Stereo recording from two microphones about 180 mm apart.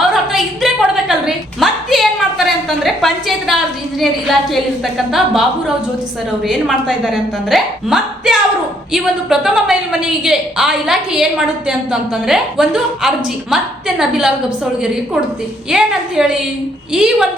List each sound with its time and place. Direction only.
0.0 s a sound: centre (ahead or behind)
4.0 s a woman's voice: centre (ahead or behind)
15.7 s a woman's voice: 5° right (ahead or behind)